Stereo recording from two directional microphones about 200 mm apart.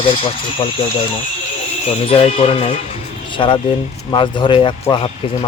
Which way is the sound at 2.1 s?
30° left (ahead or behind).